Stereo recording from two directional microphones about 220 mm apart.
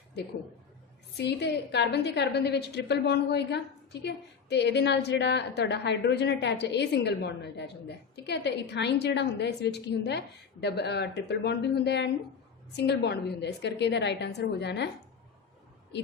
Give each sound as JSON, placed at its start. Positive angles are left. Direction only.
{"t": 1.1, "sound": "a woman's voice", "side_deg": 50}